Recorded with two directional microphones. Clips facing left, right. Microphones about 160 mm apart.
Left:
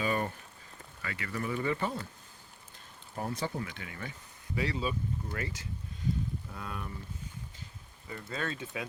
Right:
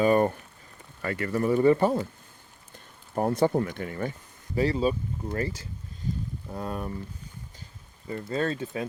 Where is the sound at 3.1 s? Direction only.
50° right (ahead or behind).